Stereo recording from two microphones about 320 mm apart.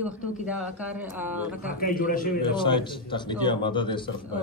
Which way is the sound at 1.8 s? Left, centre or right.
Left.